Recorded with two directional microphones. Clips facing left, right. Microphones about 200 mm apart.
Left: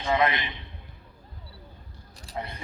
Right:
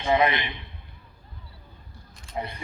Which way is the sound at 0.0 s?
20° right (ahead or behind).